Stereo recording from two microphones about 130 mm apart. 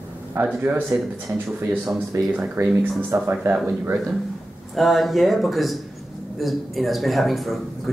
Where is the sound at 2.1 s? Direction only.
20° right (ahead or behind).